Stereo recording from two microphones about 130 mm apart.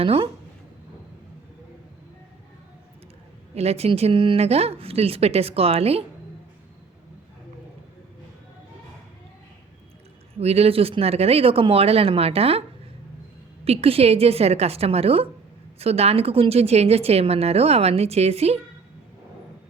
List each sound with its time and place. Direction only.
0.0 s a woman's voice: 45° right (ahead or behind)
3.5 s a woman's voice: 50° right (ahead or behind)
10.4 s a woman's voice: 50° right (ahead or behind)
13.7 s a woman's voice: 50° right (ahead or behind)